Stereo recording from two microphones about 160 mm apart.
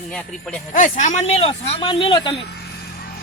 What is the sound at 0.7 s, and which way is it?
Speech, 50° left (ahead or behind).